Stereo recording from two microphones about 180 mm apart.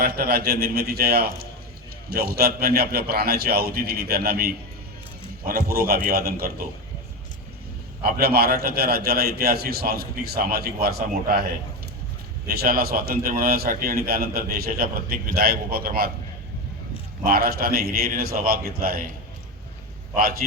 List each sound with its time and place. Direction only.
0.0 s a man's voice: 60° right (ahead or behind)
8.0 s a man's voice: 60° right (ahead or behind)
12.5 s a man's voice: 60° right (ahead or behind)
17.2 s a man's voice: 55° right (ahead or behind)
20.1 s a man's voice: 55° right (ahead or behind)